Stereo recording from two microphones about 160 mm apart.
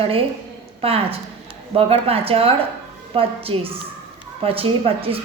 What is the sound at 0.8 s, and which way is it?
A woman's voice, 35° right (ahead or behind).